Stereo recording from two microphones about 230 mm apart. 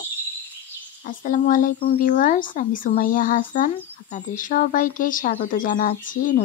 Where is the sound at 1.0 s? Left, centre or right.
Left.